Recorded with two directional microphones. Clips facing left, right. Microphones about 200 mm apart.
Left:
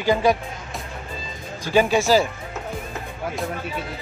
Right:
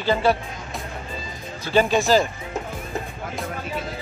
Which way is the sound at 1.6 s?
10° left (ahead or behind).